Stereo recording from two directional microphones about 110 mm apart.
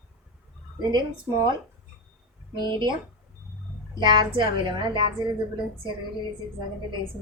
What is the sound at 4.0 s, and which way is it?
A woman's voice, 45° right (ahead or behind).